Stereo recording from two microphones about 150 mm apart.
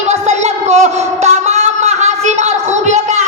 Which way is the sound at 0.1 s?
50° right (ahead or behind).